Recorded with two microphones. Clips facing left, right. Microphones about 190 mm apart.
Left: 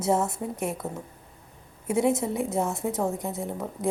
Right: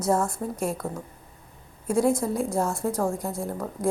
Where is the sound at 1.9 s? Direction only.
25° left (ahead or behind).